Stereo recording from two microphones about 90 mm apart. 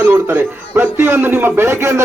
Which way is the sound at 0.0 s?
25° right (ahead or behind).